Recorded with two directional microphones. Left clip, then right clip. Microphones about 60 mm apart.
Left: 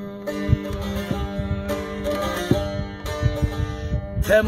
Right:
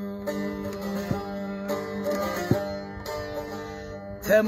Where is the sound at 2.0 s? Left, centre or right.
Right.